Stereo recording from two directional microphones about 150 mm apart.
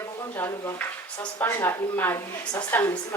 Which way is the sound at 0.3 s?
15° left (ahead or behind).